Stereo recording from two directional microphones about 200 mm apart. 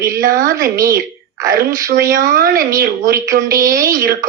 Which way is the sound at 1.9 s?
45° right (ahead or behind).